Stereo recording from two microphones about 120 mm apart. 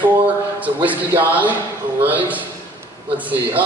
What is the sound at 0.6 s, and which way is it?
A man's voice, 15° right (ahead or behind).